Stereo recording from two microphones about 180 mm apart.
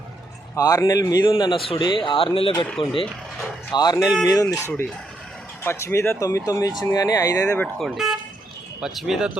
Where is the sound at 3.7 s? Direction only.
20° left (ahead or behind).